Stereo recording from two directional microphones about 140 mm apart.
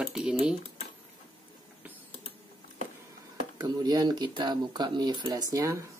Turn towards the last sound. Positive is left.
turn(degrees=-20)  # may be behind; listen again after turning